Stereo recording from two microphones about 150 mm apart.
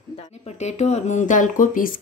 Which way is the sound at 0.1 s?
45° left (ahead or behind).